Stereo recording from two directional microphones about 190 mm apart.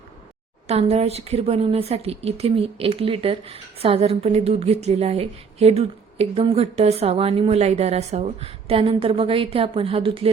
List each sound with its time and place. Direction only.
0.7 s a woman's voice: 35° right (ahead or behind)